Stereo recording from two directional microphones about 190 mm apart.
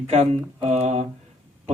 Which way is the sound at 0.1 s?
35° right (ahead or behind).